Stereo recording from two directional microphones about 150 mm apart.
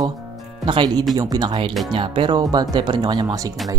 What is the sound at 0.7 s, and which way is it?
Speech, 30° right (ahead or behind).